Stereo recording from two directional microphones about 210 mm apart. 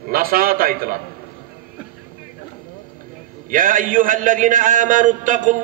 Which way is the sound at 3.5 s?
40° right (ahead or behind).